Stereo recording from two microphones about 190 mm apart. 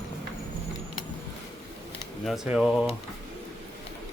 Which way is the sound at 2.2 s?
Centre (ahead or behind).